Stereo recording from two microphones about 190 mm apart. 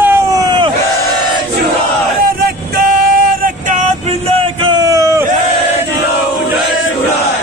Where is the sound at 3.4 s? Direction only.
40° right (ahead or behind).